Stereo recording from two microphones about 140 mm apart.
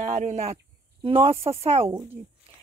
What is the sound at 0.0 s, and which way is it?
A woman's voice, 60° right (ahead or behind).